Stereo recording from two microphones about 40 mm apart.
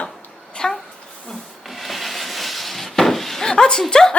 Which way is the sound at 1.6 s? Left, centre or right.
Centre.